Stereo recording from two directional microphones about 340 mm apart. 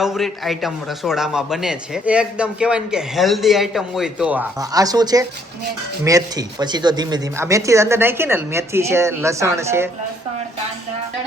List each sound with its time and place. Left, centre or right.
0.0 s a man's voice: centre